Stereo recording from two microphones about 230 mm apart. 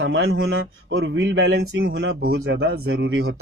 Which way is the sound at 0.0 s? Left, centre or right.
Right.